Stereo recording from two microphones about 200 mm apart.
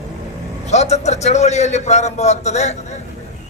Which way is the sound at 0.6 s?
35° left (ahead or behind).